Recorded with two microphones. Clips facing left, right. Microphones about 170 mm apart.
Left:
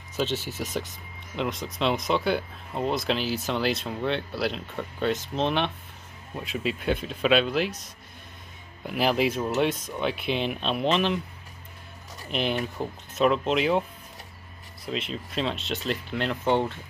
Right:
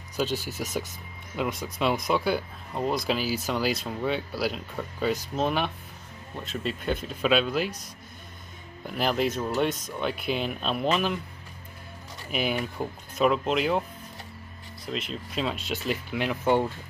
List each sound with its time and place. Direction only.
0.1 s speech: centre (ahead or behind)
6.3 s speech: 5° left (ahead or behind)
8.8 s speech: 5° left (ahead or behind)
12.3 s speech: 5° right (ahead or behind)
14.9 s speech: centre (ahead or behind)